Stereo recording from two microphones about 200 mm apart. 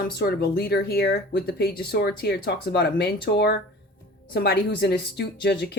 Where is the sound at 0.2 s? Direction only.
50° left (ahead or behind).